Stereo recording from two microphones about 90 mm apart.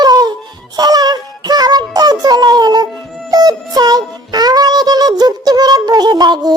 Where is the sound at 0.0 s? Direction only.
50° right (ahead or behind).